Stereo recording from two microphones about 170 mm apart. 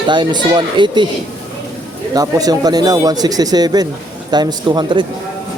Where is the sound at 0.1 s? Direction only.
25° right (ahead or behind).